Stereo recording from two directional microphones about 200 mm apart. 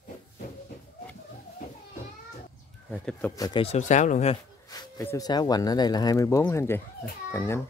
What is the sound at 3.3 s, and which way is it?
Speech, 20° left (ahead or behind).